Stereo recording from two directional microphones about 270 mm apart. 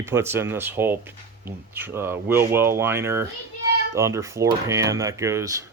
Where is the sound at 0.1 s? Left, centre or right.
Centre.